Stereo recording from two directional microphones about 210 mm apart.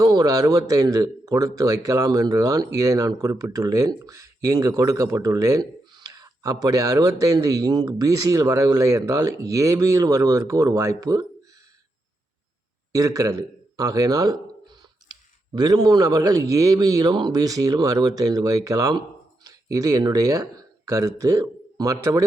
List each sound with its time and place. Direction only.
0.0 s speech: 15° right (ahead or behind)
12.9 s speech: 15° right (ahead or behind)
15.5 s speech: 20° right (ahead or behind)